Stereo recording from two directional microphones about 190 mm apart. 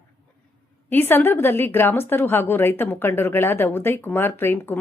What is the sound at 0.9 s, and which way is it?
A woman's voice, 10° left (ahead or behind).